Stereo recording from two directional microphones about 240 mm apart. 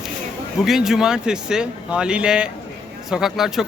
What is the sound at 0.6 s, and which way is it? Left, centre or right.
A man's voice, centre.